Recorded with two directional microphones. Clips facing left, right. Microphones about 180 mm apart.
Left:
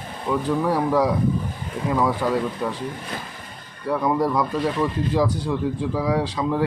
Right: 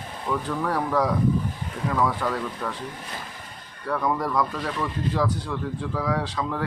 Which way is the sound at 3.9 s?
10° left (ahead or behind).